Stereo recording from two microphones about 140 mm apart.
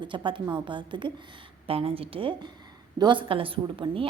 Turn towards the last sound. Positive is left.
turn(degrees=-35)  # may be behind; listen again after turning